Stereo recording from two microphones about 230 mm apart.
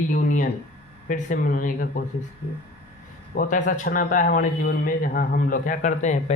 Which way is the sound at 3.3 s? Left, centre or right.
Left.